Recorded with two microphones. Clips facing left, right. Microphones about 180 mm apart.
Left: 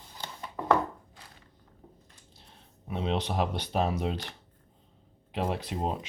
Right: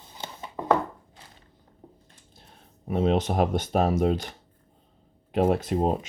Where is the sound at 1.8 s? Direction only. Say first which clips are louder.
Right 4 dB; 30° right (ahead or behind).